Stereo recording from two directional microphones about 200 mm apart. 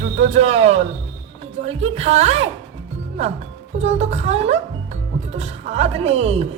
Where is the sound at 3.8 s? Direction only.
35° right (ahead or behind).